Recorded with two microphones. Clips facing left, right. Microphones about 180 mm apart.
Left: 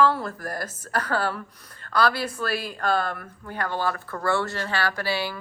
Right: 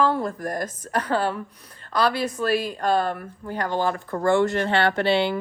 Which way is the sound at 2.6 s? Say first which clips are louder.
Right 3 dB; 40° right (ahead or behind).